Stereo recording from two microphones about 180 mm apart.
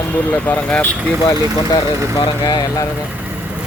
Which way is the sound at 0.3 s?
10° left (ahead or behind).